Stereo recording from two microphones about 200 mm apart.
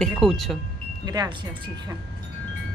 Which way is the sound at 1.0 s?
20° right (ahead or behind).